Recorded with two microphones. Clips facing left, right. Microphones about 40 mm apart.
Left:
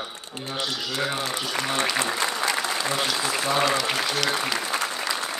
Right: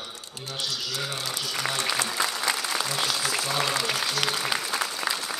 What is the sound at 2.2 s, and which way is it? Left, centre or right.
Applause, left.